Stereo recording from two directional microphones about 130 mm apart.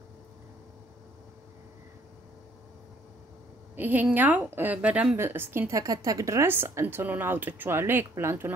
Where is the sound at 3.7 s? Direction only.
15° right (ahead or behind).